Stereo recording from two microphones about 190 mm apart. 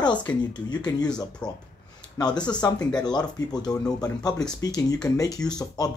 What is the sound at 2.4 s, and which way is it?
Speech, 20° left (ahead or behind).